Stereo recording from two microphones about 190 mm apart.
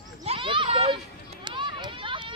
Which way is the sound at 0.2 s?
30° right (ahead or behind).